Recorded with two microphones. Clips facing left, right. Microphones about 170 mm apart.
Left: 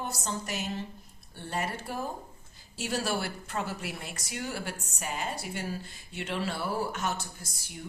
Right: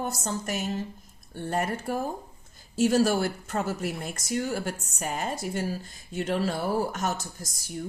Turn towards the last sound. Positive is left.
turn(degrees=-40)  # may be behind; listen again after turning